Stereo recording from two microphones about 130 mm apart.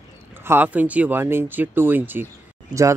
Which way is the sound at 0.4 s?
15° right (ahead or behind).